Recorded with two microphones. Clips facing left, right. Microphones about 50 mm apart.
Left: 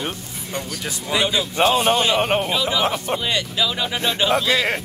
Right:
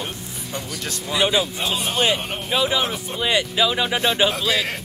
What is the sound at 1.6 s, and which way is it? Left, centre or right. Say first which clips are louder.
Speech: left 8 dB; left.